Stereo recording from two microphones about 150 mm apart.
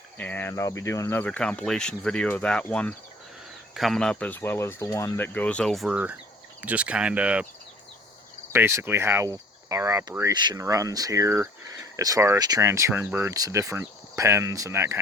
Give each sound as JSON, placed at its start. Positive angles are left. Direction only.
{"t": 0.2, "sound": "speech", "side_deg": 15}
{"t": 8.5, "sound": "cricket", "side_deg": -15}